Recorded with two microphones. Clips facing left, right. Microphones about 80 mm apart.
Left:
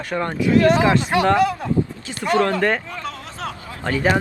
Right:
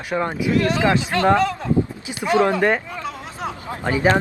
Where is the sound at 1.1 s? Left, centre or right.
Centre.